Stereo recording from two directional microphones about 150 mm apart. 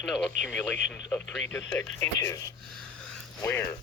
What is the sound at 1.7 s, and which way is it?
Speech, 20° left (ahead or behind).